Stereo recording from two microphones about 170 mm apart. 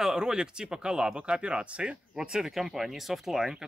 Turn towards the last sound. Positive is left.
turn(degrees=0)  # may be behind; listen again after turning